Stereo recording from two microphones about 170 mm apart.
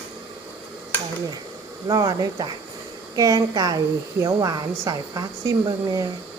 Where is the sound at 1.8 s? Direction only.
20° right (ahead or behind).